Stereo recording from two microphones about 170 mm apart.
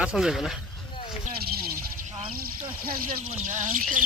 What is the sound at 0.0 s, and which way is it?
Speech, 5° right (ahead or behind).